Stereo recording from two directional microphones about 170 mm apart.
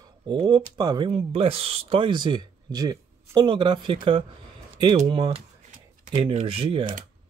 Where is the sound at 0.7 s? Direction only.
25° right (ahead or behind).